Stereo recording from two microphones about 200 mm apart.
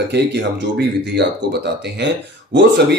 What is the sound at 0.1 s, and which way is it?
Speech, 55° right (ahead or behind).